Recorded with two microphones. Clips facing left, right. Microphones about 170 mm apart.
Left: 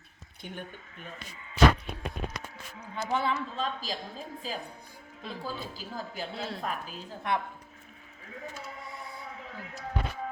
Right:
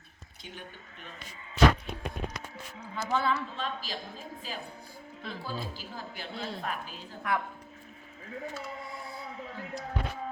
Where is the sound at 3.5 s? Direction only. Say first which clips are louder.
Left 3 dB; 40° left (ahead or behind).